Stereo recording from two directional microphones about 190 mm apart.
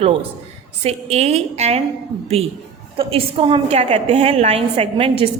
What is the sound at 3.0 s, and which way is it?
A woman's voice, 30° right (ahead or behind).